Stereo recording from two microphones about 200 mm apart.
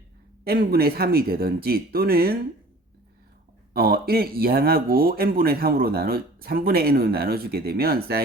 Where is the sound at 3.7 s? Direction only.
50° right (ahead or behind).